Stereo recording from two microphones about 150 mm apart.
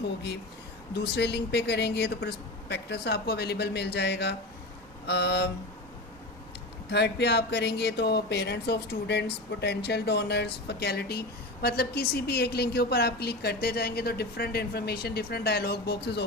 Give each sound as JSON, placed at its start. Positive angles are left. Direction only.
{"t": 0.9, "sound": "speech", "side_deg": 90}
{"t": 6.9, "sound": "speech", "side_deg": 90}